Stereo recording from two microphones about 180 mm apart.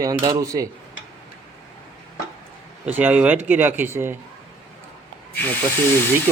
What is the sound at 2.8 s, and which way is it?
Speech, 10° right (ahead or behind).